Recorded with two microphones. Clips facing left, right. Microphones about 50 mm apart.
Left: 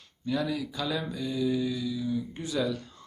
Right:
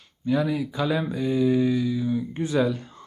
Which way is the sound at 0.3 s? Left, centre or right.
Right.